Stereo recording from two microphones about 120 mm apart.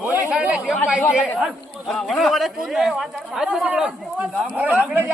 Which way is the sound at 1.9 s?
Centre (ahead or behind).